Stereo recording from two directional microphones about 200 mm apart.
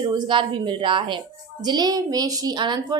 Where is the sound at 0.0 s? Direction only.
25° right (ahead or behind).